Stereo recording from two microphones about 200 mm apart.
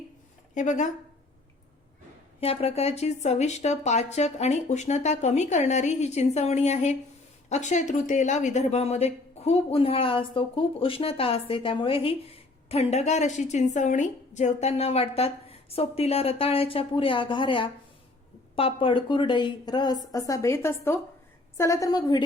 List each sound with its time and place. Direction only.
0.5 s speech: 35° left (ahead or behind)
2.4 s speech: 30° left (ahead or behind)